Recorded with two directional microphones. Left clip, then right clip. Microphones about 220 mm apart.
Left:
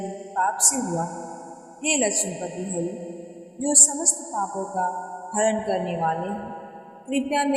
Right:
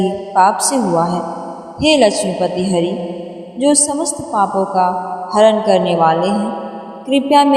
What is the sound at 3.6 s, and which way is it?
Speech, 25° right (ahead or behind).